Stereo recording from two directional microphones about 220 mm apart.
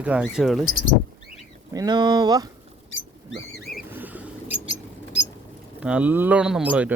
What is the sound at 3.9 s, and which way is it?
Bird, 5° right (ahead or behind).